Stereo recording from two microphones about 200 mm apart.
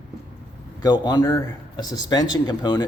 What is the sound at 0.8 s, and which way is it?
Speech, 20° left (ahead or behind).